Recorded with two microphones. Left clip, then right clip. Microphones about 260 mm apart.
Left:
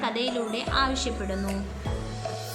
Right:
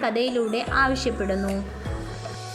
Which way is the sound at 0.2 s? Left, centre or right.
Left.